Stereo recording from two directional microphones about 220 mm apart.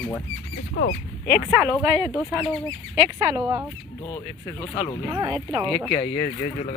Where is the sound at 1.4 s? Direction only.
5° right (ahead or behind).